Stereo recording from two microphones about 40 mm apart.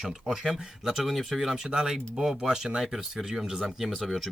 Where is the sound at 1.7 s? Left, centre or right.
Centre.